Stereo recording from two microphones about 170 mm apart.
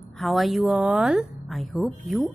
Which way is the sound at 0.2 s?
Centre (ahead or behind).